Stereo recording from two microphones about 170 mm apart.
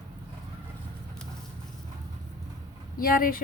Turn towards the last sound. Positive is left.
turn(degrees=55)  # may be behind; listen again after turning